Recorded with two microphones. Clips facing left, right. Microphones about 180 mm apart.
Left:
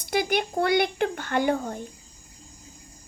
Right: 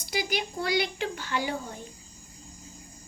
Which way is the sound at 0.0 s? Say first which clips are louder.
Left 6 dB; 55° left (ahead or behind).